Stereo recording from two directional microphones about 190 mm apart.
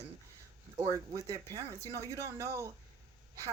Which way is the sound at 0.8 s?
15° right (ahead or behind).